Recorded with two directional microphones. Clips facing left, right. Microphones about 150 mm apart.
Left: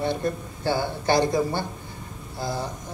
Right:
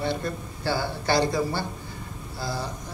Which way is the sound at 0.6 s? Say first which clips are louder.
Left 2 dB; 20° left (ahead or behind).